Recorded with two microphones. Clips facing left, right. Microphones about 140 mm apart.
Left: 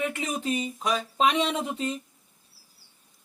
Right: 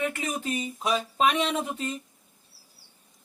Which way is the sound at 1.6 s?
15° left (ahead or behind).